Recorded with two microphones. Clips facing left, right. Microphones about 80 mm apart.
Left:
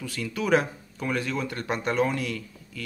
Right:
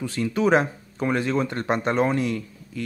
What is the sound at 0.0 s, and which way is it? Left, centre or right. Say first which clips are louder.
Speech: right 7 dB; right.